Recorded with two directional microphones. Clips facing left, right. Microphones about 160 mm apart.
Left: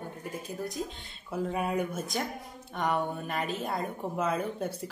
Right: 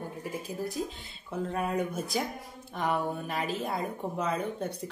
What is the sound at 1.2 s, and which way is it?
A woman's voice, 5° left (ahead or behind).